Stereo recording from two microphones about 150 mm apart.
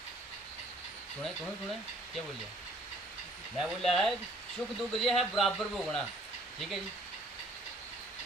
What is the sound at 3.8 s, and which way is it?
Speech, centre (ahead or behind).